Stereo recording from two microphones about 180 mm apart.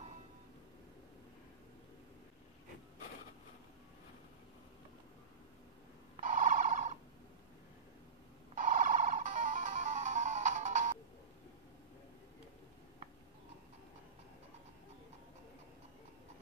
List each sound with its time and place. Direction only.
6.2 s telephone: 45° right (ahead or behind)
8.5 s music: 50° right (ahead or behind)